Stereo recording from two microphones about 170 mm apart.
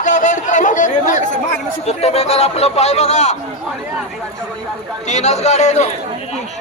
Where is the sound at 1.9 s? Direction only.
40° left (ahead or behind).